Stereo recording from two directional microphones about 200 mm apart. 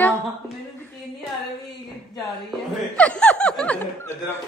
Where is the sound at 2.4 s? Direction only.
5° left (ahead or behind).